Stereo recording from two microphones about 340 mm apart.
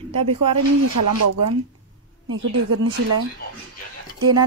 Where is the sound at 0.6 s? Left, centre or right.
Right.